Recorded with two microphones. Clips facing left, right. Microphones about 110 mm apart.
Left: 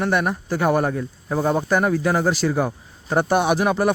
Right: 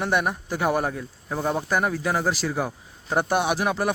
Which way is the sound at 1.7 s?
5° right (ahead or behind).